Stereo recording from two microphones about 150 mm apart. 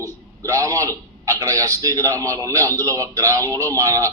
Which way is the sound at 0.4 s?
20° right (ahead or behind).